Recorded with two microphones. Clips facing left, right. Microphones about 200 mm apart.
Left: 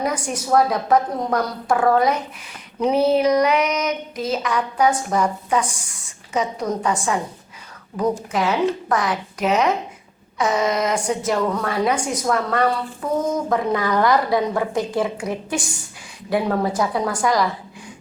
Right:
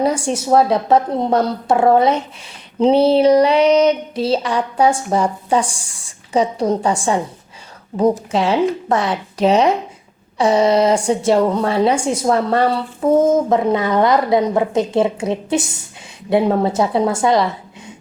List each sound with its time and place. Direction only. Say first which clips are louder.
0.0 s a woman's voice: right 6 dB; 30° right (ahead or behind)
2.7 s a sound: right 5 dB; 30° right (ahead or behind)
8.3 s a woman's voice: right 4 dB; 30° right (ahead or behind)